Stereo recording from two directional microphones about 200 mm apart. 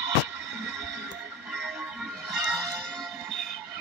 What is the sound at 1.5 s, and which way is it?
Music, centre (ahead or behind).